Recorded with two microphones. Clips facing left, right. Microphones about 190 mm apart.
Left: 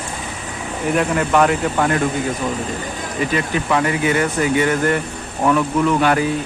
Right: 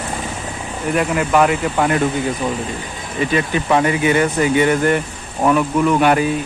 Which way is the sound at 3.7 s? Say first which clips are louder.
Right 3 dB; 20° right (ahead or behind).